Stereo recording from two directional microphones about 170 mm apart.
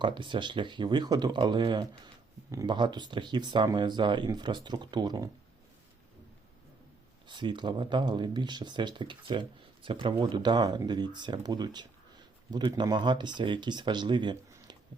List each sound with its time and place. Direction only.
0.0 s speech: 30° right (ahead or behind)
7.3 s speech: 25° right (ahead or behind)